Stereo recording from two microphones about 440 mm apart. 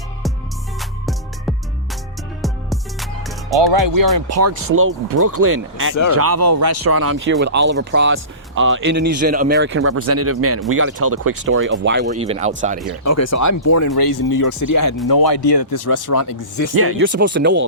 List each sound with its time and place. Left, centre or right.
0.8 s music: centre
3.6 s speech: right
4.4 s speech: right
5.4 s speech: right; by 12.9 s centre
13.1 s speech: left
15.0 s speech: left
16.7 s speech: right